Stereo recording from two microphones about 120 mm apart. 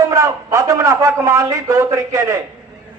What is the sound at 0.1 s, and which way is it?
A man's voice, 25° right (ahead or behind).